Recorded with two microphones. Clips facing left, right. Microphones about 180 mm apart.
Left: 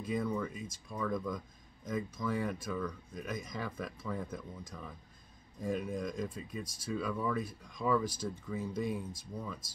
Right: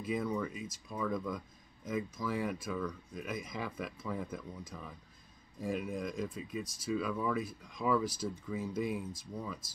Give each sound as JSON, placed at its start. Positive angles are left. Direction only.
{"t": 0.0, "sound": "speech", "side_deg": -5}